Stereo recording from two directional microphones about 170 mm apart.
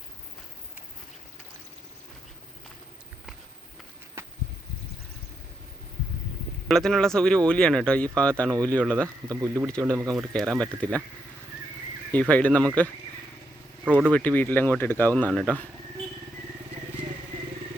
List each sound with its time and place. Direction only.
6.7 s speech: 5° left (ahead or behind)
9.3 s speech: 20° right (ahead or behind)
10.2 s speech: centre (ahead or behind)
12.3 s speech: 5° left (ahead or behind)
13.8 s speech: 10° right (ahead or behind)
14.1 s speech: 10° left (ahead or behind)